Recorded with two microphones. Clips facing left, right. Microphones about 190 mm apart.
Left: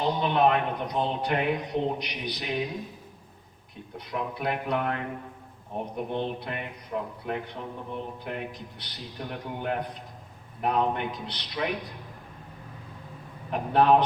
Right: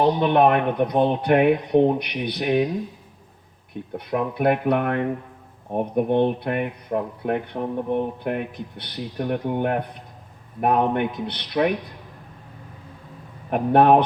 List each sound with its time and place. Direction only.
0.0 s speech: 60° right (ahead or behind)
3.9 s speech: 55° right (ahead or behind)
13.5 s speech: 55° right (ahead or behind)